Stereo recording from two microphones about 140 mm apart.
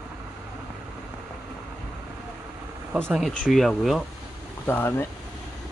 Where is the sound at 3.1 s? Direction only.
5° right (ahead or behind).